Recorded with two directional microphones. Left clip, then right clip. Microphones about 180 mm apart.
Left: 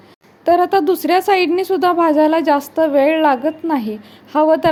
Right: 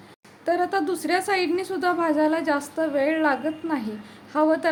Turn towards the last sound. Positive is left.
turn(degrees=35)  # may be behind; listen again after turning